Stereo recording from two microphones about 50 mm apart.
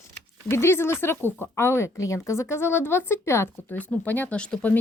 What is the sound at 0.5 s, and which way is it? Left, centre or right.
Speech, left.